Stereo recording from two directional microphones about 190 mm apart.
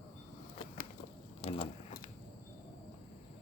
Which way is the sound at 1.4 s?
35° left (ahead or behind).